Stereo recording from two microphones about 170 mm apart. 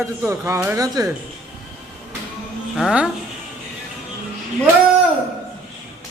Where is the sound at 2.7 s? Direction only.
5° right (ahead or behind).